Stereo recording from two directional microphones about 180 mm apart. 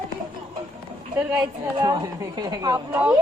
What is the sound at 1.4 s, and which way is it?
Speech, 25° right (ahead or behind).